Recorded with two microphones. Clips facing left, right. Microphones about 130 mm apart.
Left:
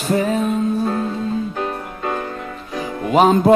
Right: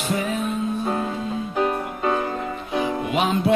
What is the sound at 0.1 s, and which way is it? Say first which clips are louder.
Music: left 7 dB; 35° left (ahead or behind).